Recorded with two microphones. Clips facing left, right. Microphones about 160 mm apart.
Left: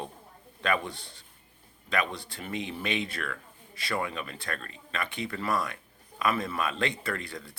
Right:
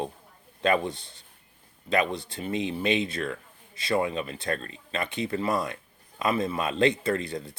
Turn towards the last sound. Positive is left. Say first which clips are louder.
# right 7 dB
turn(degrees=-25)  # may be behind; listen again after turning